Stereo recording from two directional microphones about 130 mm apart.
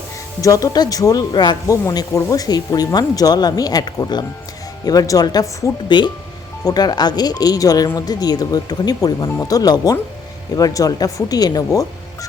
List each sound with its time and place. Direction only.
0.4 s speech: 25° left (ahead or behind)